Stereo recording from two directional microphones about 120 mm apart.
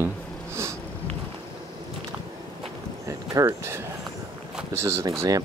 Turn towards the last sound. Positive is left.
turn(degrees=-30)  # may be behind; listen again after turning